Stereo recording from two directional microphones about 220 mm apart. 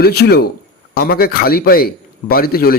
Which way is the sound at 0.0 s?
45° left (ahead or behind).